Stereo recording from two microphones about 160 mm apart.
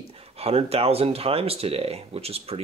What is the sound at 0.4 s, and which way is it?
Speech, 40° right (ahead or behind).